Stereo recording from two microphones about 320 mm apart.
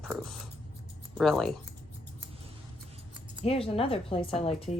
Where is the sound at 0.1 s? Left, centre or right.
Centre.